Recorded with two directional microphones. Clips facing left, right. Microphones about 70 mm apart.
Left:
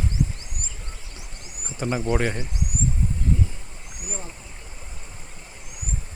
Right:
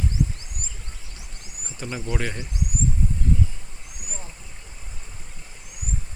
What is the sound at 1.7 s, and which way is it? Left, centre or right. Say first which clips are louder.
Speech: left 6 dB; left.